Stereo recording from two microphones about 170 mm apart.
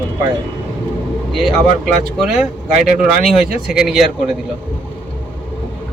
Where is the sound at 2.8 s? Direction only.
5° right (ahead or behind).